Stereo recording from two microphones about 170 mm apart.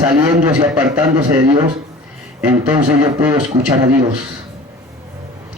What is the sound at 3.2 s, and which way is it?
Speech, 10° right (ahead or behind).